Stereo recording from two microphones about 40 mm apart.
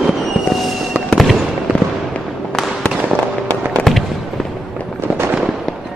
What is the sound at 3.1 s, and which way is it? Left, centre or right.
Fireworks, left.